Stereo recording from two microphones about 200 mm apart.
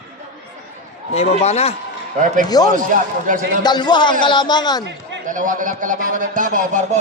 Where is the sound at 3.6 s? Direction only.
20° left (ahead or behind).